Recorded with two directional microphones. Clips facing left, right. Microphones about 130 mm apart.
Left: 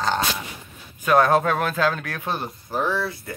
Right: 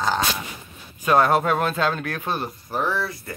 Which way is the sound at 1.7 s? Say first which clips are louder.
Even; 20° right (ahead or behind).